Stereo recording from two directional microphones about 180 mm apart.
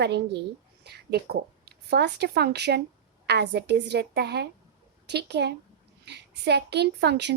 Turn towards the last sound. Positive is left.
turn(degrees=-70)  # may be behind; listen again after turning